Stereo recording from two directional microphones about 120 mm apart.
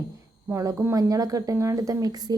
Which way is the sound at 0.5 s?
25° right (ahead or behind).